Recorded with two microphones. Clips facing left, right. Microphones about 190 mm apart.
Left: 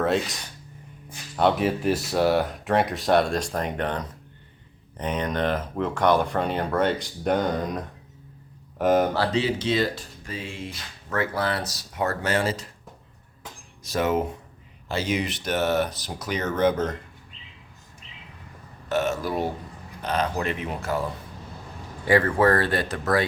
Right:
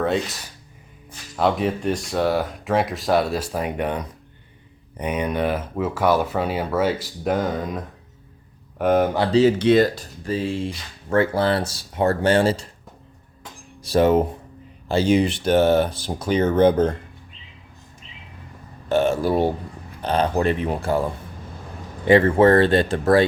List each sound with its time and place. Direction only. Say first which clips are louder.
0.0 s speech: right 1 dB; centre (ahead or behind)
1.4 s speech: right 1 dB; centre (ahead or behind)
9.6 s speech: right 8 dB; 55° right (ahead or behind); by 12.7 s 30° right (ahead or behind)
13.8 s speech: right 7 dB; 30° right (ahead or behind)
18.9 s speech: right 6 dB; 30° right (ahead or behind)
22.0 s speech: right 5 dB; 25° right (ahead or behind)